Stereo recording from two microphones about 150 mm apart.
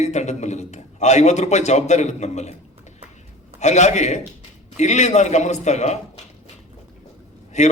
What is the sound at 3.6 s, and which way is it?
A man's voice, 50° left (ahead or behind).